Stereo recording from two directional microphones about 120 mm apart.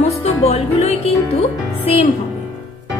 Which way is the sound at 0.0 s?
60° left (ahead or behind).